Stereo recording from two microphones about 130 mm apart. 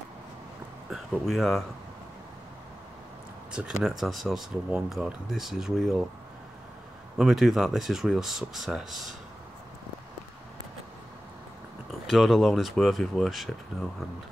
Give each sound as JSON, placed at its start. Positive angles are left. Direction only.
{"t": 0.8, "sound": "speech", "side_deg": 0}
{"t": 3.5, "sound": "speech", "side_deg": -5}
{"t": 7.2, "sound": "speech", "side_deg": -5}
{"t": 12.1, "sound": "speech", "side_deg": 0}